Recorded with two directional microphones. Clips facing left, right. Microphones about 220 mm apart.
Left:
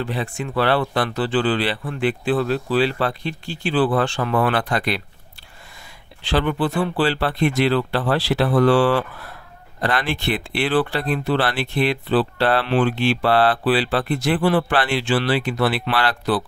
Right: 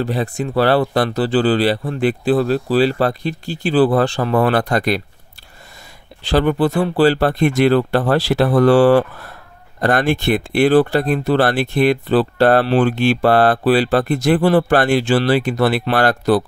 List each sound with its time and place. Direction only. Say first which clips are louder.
0.0 s speech: right 5 dB; 40° right (ahead or behind)
6.2 s speech: right 5 dB; 40° right (ahead or behind)